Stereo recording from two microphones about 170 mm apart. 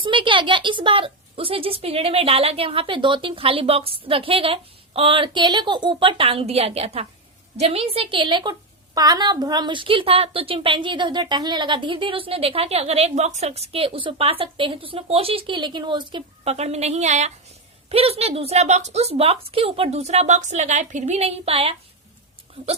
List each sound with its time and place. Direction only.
0.0 s a woman's voice: 30° right (ahead or behind)